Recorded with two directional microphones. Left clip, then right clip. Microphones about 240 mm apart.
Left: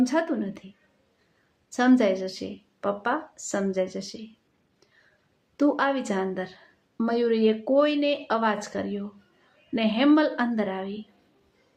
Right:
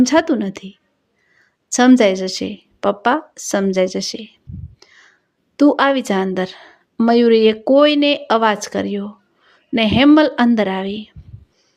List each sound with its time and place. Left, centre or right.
0.0 s a woman's voice: right
1.7 s a woman's voice: right
5.5 s a woman's voice: right